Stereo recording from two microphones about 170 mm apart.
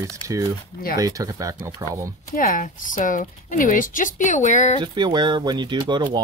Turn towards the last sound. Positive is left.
turn(degrees=-25)  # may be behind; listen again after turning